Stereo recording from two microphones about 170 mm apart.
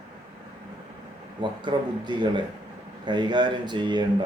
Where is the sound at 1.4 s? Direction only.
25° right (ahead or behind).